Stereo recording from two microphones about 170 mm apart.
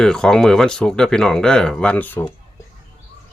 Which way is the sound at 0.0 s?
5° left (ahead or behind).